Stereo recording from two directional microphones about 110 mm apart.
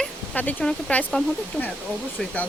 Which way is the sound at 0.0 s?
10° left (ahead or behind).